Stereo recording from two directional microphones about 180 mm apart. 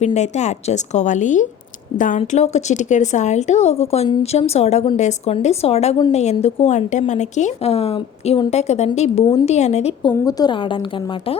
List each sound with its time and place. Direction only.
0.0 s a woman's voice: 40° left (ahead or behind)
10.1 s a woman's voice: 20° left (ahead or behind)